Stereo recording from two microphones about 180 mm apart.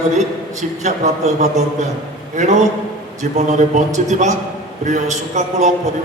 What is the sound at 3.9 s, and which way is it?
A man's voice, 40° right (ahead or behind).